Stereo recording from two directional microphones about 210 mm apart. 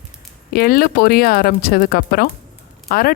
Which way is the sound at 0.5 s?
45° left (ahead or behind).